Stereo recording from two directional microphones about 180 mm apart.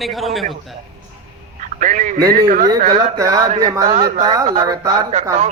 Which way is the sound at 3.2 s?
20° right (ahead or behind).